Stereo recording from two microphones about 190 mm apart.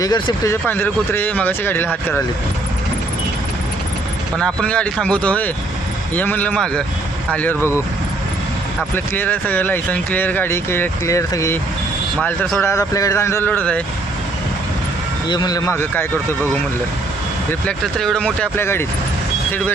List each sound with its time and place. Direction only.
0.0 s speech: 20° left (ahead or behind)
4.4 s speech: 5° left (ahead or behind)
9.1 s speech: 10° left (ahead or behind)
15.3 s speech: 20° left (ahead or behind)
17.5 s speech: 5° left (ahead or behind)